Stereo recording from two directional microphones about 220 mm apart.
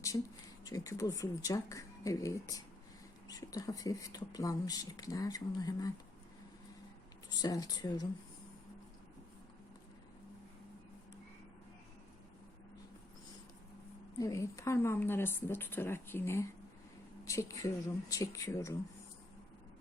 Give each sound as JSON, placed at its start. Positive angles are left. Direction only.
{"t": 0.6, "sound": "speech", "side_deg": 15}
{"t": 7.4, "sound": "speech", "side_deg": 20}
{"t": 14.2, "sound": "speech", "side_deg": 15}